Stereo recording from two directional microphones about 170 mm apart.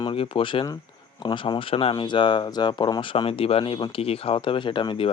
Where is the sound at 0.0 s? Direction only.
30° left (ahead or behind).